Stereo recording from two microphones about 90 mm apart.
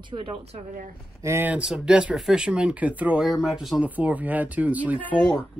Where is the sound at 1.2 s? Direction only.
30° right (ahead or behind).